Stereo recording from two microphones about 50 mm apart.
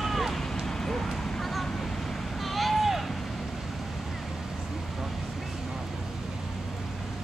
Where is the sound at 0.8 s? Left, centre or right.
Centre.